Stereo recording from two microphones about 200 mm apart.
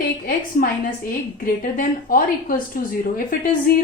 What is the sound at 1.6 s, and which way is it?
Speech, 45° left (ahead or behind).